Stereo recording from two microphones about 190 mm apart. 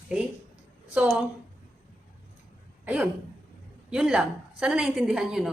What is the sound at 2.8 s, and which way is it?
Speech, 10° right (ahead or behind).